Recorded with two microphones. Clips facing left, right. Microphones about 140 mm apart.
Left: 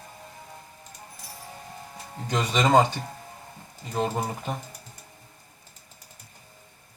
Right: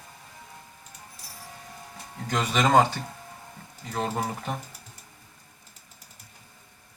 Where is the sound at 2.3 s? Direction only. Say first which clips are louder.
Even; 10° left (ahead or behind).